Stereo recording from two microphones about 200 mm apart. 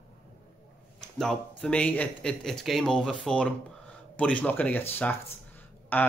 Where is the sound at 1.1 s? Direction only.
5° left (ahead or behind).